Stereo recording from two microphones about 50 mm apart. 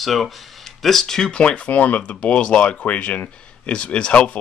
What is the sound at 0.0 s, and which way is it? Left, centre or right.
Speech, centre.